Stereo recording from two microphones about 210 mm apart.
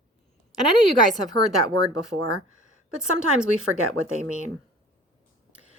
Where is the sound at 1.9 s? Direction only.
90° right.